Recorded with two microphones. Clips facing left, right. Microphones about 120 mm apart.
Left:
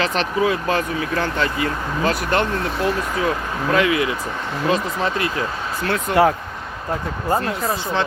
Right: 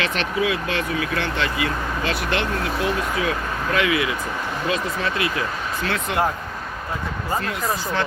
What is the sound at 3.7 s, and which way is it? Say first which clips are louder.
Speech: left 3 dB; 40° left (ahead or behind).